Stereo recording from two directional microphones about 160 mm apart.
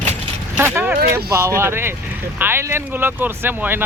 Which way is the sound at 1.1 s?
15° right (ahead or behind).